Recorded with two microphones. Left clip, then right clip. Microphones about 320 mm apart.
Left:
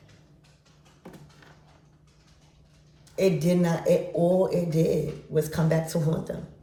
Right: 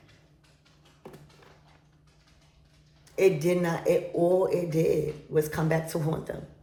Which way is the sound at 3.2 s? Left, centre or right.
Centre.